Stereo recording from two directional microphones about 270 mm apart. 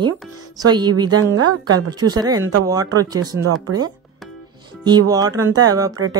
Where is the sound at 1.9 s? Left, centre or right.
Centre.